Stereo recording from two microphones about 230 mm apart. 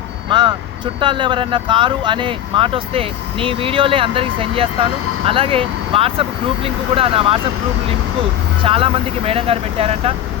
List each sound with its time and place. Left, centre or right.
0.3 s vehicle: right
0.9 s speech: right
8.6 s speech: right